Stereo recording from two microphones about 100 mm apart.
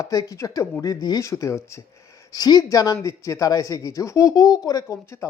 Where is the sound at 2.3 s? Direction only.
40° left (ahead or behind).